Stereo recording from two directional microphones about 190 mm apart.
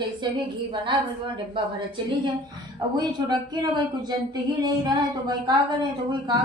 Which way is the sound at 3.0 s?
20° right (ahead or behind).